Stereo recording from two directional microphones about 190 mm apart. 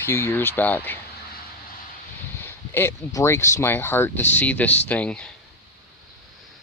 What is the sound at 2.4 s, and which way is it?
Speech, 10° left (ahead or behind).